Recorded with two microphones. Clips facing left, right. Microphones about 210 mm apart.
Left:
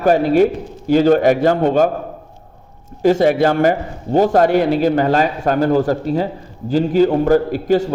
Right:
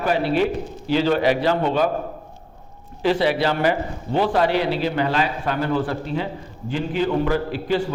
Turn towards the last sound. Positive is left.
turn(degrees=45)  # may be behind; listen again after turning